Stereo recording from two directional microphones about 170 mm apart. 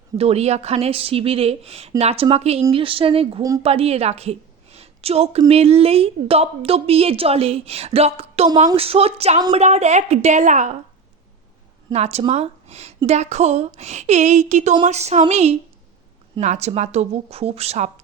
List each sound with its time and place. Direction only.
0.2 s a woman's voice: 35° right (ahead or behind)
11.9 s a woman's voice: 35° right (ahead or behind)